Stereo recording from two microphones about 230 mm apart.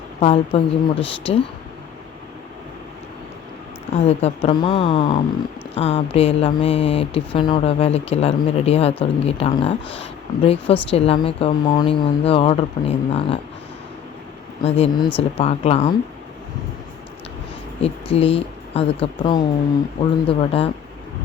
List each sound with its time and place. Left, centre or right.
0.2 s speech: left
4.0 s speech: left
14.6 s speech: left
17.8 s speech: left